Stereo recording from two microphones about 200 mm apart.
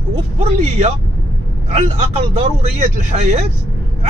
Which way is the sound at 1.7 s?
35° right (ahead or behind).